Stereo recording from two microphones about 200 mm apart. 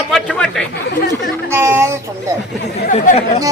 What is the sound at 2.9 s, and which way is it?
Speech, 35° left (ahead or behind).